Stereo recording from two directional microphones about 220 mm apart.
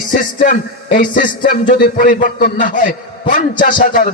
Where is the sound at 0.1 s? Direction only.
35° left (ahead or behind).